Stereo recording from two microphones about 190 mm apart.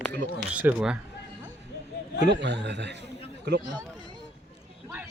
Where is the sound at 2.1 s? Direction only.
65° right (ahead or behind).